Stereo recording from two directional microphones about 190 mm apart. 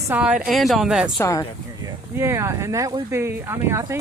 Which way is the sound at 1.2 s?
15° left (ahead or behind).